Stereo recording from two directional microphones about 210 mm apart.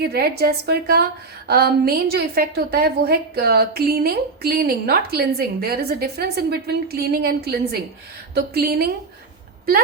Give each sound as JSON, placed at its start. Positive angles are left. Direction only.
{"t": 0.0, "sound": "a woman's voice", "side_deg": -50}